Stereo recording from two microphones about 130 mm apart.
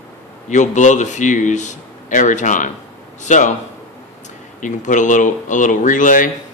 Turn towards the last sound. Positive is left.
turn(degrees=90)